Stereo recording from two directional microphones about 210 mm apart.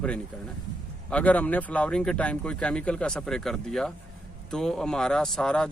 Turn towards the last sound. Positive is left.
turn(degrees=5)  # may be behind; listen again after turning